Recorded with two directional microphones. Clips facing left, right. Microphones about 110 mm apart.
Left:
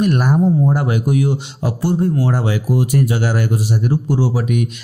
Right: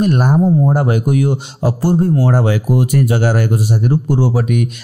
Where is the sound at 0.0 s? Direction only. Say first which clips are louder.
Right 2 dB; 20° right (ahead or behind).